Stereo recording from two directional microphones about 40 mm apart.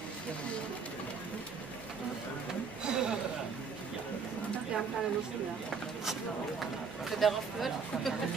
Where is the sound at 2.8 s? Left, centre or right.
Centre.